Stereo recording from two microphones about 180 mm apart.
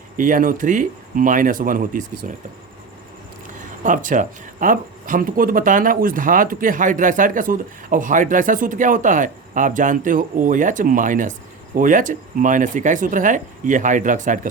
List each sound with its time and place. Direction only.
0.2 s speech: 50° right (ahead or behind)
3.8 s speech: 45° right (ahead or behind)